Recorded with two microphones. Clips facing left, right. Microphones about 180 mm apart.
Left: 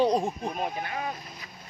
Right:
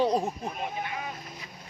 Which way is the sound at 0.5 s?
45° left (ahead or behind).